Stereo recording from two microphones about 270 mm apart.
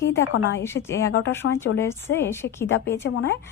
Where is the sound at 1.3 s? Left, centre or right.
Left.